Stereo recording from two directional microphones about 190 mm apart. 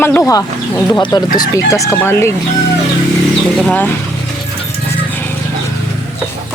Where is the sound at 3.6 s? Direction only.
5° left (ahead or behind).